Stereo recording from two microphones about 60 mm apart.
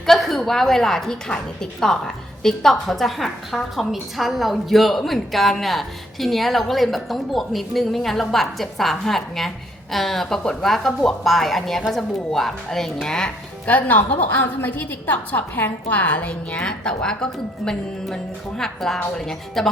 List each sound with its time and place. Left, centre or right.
0.0 s a woman's voice: centre
13.7 s a woman's voice: left; by 19.7 s centre